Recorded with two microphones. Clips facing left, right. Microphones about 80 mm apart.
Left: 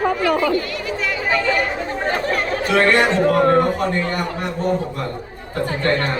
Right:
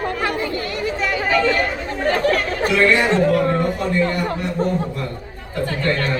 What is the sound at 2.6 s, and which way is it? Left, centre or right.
A man's voice, left.